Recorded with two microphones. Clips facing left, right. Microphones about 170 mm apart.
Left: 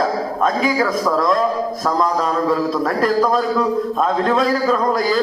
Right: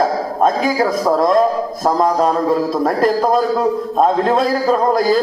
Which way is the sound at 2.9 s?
40° right (ahead or behind).